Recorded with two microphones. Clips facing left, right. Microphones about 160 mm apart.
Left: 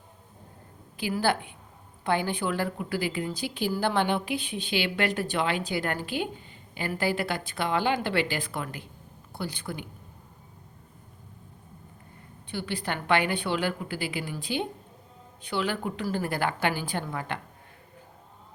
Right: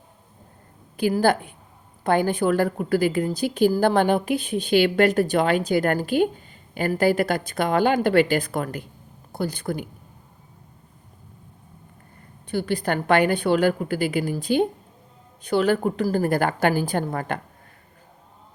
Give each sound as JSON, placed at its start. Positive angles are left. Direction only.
{"t": 0.9, "sound": "a woman's voice", "side_deg": -45}
{"t": 12.5, "sound": "a woman's voice", "side_deg": -45}